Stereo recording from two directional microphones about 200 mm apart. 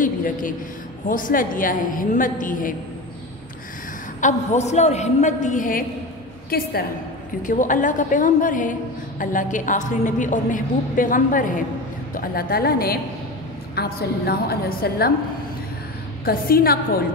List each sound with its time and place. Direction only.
0.0 s a woman's voice: 40° left (ahead or behind)
4.2 s a woman's voice: 35° left (ahead or behind)
16.3 s a woman's voice: 45° left (ahead or behind)